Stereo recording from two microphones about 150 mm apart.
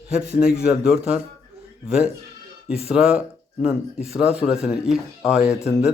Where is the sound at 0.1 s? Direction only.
5° right (ahead or behind).